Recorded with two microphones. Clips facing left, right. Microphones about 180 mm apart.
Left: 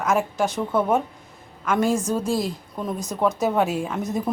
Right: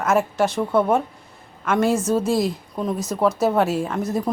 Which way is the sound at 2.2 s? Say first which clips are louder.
Right 3 dB; 40° right (ahead or behind).